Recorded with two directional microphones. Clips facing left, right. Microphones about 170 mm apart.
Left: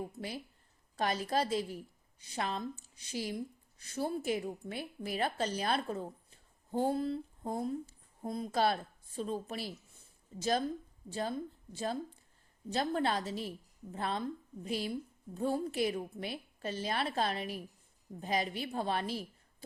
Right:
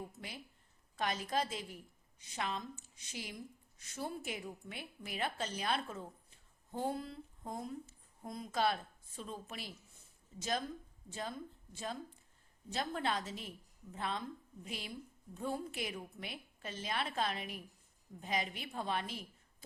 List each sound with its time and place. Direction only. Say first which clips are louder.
0.9 s a woman's voice: left 4 dB; 35° left (ahead or behind)